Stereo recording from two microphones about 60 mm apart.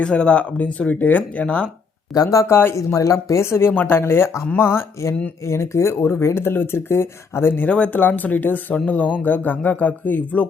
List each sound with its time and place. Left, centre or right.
0.0 s speech: centre
2.1 s speech: left
2.5 s speech: left
2.7 s speech: left
7.9 s speech: left